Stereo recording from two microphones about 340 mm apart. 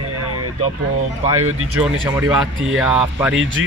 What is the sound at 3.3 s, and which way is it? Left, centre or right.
Speech, right.